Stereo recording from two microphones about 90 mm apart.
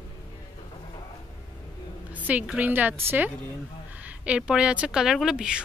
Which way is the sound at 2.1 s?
15° right (ahead or behind).